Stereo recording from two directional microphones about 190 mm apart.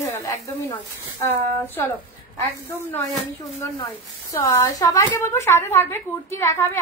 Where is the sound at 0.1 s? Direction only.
10° left (ahead or behind).